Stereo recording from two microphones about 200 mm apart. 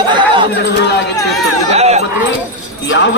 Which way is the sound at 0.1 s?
25° right (ahead or behind).